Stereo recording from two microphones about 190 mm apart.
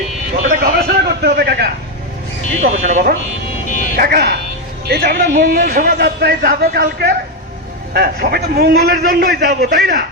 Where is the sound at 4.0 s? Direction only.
55° right (ahead or behind).